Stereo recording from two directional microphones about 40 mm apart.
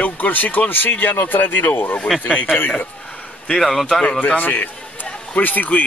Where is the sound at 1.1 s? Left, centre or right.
Left.